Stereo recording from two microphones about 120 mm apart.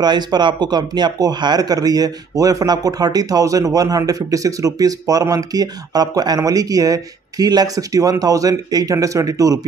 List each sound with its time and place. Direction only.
0.0 s a man's voice: 35° right (ahead or behind)